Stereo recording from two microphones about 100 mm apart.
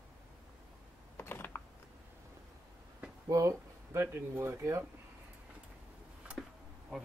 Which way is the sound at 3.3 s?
30° right (ahead or behind).